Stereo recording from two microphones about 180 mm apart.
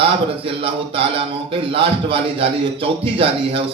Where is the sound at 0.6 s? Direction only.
30° right (ahead or behind).